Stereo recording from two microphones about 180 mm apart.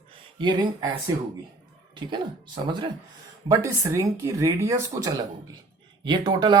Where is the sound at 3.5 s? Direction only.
15° right (ahead or behind).